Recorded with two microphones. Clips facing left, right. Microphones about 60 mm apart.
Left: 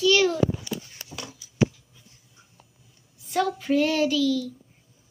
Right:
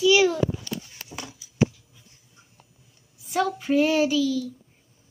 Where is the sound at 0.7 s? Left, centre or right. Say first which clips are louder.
Left 1 dB; centre.